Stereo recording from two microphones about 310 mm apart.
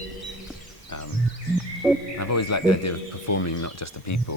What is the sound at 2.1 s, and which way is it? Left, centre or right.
Speech, left.